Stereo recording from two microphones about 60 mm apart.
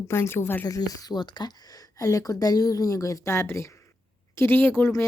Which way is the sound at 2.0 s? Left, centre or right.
Left.